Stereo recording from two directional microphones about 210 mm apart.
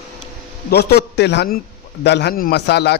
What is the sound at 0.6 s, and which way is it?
Speech, 50° left (ahead or behind).